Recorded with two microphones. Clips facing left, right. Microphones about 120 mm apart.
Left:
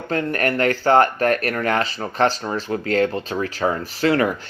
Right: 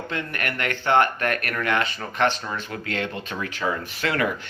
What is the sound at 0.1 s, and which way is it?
A man's voice, 40° left (ahead or behind).